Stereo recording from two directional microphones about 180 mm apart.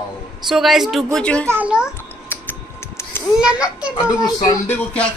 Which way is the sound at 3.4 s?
5° right (ahead or behind).